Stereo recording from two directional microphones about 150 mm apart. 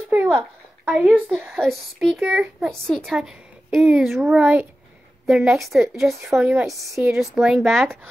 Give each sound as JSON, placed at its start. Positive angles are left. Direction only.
{"t": 0.1, "sound": "babbling", "side_deg": -15}
{"t": 0.8, "sound": "a child's voice", "side_deg": -5}
{"t": 1.5, "sound": "a woman's voice", "side_deg": 0}